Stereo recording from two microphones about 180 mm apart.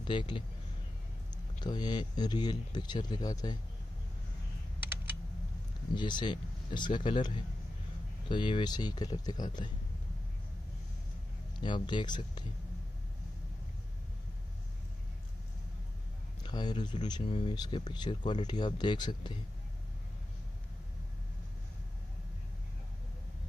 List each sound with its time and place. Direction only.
0.0 s speech: 25° left (ahead or behind)
1.6 s speech: 25° left (ahead or behind)
5.9 s speech: 25° left (ahead or behind)
11.6 s speech: 25° left (ahead or behind)
16.4 s speech: 25° left (ahead or behind)